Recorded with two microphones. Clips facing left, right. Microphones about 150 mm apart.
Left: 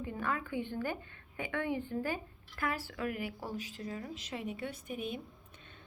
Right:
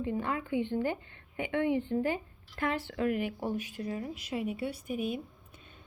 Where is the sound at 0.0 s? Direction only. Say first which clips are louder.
Right 4 dB; 20° right (ahead or behind).